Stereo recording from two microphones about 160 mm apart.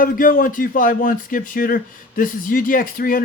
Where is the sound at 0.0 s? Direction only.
60° left (ahead or behind).